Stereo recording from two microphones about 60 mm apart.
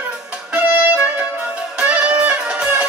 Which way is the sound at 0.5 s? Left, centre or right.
Right.